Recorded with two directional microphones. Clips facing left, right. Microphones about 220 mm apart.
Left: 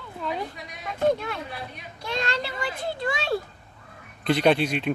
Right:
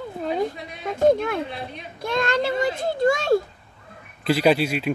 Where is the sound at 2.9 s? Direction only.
45° right (ahead or behind).